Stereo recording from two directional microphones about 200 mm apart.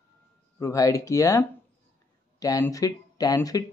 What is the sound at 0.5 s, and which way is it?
Speech, 15° left (ahead or behind).